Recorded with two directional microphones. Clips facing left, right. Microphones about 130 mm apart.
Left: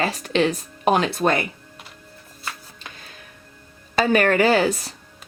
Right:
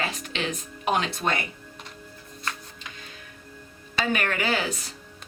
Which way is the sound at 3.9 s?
40° left (ahead or behind).